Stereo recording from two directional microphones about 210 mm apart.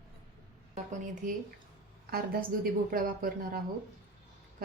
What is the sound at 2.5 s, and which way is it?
Speech, 45° right (ahead or behind).